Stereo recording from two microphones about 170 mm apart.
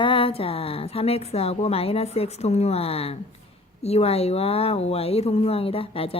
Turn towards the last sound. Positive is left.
turn(degrees=35)  # may be behind; listen again after turning